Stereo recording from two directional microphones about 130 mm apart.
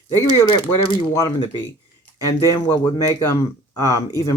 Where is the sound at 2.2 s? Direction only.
25° left (ahead or behind).